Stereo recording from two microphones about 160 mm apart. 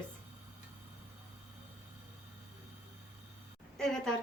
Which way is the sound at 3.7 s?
5° left (ahead or behind).